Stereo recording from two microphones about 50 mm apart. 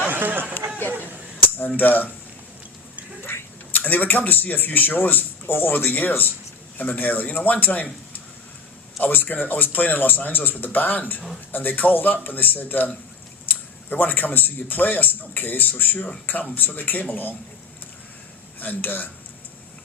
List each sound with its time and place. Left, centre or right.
0.1 s a sound: right
1.5 s a man's voice: left
3.7 s a man's voice: left
9.0 s a man's voice: left
18.6 s a man's voice: left